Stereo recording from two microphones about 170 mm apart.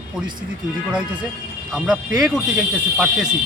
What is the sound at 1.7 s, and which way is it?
Speech, 5° right (ahead or behind).